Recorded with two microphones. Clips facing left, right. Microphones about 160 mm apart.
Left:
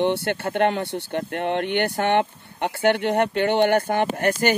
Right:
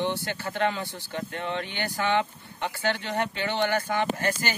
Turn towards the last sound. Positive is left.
turn(degrees=60)  # may be behind; listen again after turning